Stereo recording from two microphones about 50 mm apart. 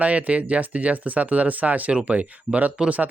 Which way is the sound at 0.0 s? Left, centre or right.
Right.